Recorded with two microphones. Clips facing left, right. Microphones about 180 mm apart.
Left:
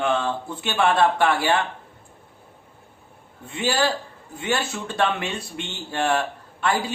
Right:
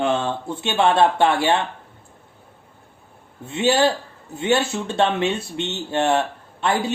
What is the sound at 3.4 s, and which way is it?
Speech, 25° right (ahead or behind).